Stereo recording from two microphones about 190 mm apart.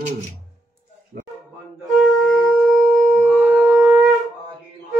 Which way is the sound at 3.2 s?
5° right (ahead or behind).